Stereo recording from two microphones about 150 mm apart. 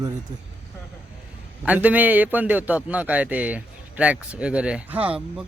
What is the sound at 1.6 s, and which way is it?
A man's voice, 10° right (ahead or behind).